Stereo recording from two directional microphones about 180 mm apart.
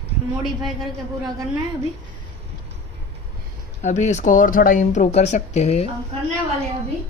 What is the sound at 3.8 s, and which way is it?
Speech, 40° left (ahead or behind).